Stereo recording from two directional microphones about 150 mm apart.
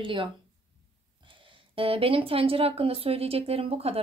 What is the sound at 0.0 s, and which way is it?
Speech, 35° right (ahead or behind).